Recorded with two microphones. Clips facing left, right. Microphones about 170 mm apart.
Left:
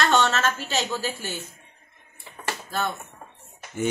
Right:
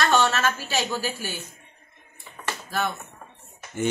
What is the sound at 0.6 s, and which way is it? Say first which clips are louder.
Speech: even; 20° left (ahead or behind).